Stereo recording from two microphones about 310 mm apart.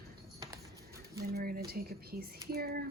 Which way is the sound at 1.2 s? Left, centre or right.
Right.